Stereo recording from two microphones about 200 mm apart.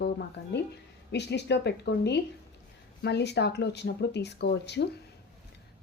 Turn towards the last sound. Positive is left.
turn(degrees=60)  # may be behind; listen again after turning